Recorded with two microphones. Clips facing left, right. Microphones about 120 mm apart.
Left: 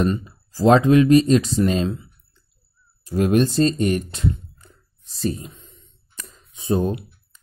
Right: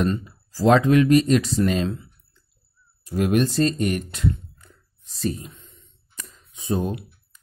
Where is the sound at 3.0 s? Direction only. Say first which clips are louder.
Left 3 dB; 30° left (ahead or behind).